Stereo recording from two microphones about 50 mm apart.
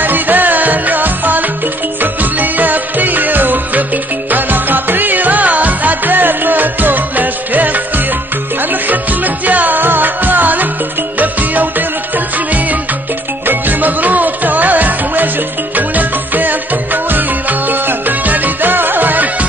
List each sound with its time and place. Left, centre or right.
0.0 s music: right
8.8 s music: right
13.5 s music: right